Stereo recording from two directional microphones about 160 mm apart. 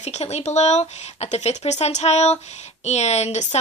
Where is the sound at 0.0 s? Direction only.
45° left (ahead or behind).